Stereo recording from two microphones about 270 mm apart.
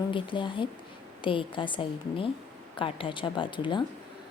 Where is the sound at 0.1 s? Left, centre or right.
Centre.